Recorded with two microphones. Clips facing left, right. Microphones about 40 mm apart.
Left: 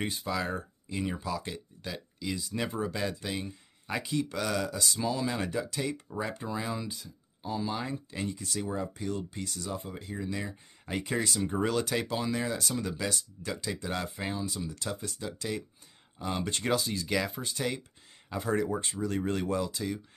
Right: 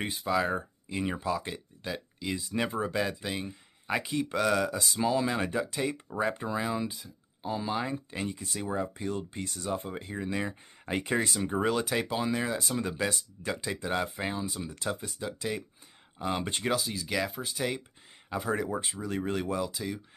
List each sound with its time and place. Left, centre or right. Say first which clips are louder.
0.0 s speech: right 3 dB; centre
0.6 s speech: right 1 dB; right
3.0 s speech: right 2 dB; centre
4.0 s speech: right 2 dB; right
12.8 s speech: right 2 dB; right
16.7 s speech: left 3 dB; centre